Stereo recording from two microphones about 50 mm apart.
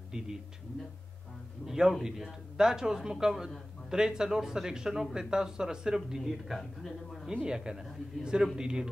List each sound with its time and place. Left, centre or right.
0.1 s speech: centre
1.7 s speech: centre
6.8 s speech: centre
7.4 s speech: centre